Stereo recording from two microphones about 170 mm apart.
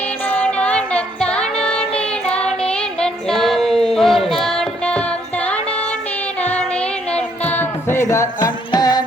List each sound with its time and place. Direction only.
0.3 s music: 10° left (ahead or behind)
1.9 s child singing: 5° left (ahead or behind)
4.4 s music: 5° left (ahead or behind); by 9.0 s 25° left (ahead or behind)